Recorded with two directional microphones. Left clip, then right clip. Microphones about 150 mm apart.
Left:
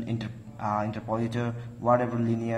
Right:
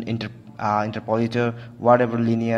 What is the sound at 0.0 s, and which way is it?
A man's voice, 45° right (ahead or behind).